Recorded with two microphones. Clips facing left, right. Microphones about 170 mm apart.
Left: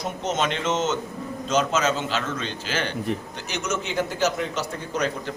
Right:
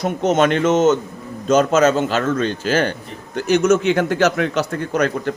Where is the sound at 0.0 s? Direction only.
55° right (ahead or behind).